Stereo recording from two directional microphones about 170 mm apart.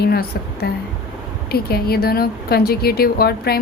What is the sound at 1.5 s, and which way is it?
A woman's voice, 65° left (ahead or behind).